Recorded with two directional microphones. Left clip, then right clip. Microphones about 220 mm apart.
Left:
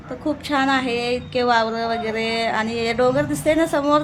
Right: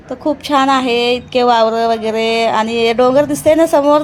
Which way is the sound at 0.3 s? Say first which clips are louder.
Right 8 dB; 30° right (ahead or behind).